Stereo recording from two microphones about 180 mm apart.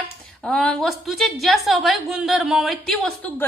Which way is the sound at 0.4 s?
5° left (ahead or behind).